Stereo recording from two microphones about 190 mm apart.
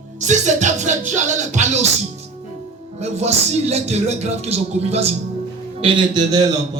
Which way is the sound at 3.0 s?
35° right (ahead or behind).